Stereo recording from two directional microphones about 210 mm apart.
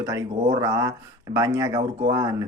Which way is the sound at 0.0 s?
15° right (ahead or behind).